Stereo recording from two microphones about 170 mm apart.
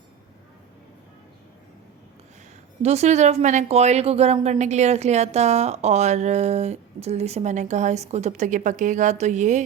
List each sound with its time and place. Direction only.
2.8 s speech: 40° right (ahead or behind)